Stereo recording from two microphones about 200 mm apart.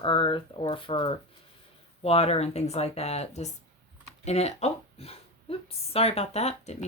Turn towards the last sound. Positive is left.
turn(degrees=35)  # may be behind; listen again after turning